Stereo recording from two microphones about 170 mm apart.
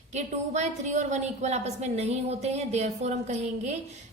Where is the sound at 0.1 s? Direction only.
40° right (ahead or behind).